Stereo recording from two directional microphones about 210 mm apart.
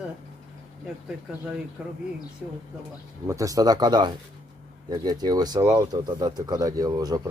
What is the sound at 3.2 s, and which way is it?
Speech, 15° right (ahead or behind).